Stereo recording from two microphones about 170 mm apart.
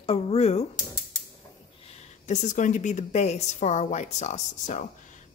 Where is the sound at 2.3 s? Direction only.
45° left (ahead or behind).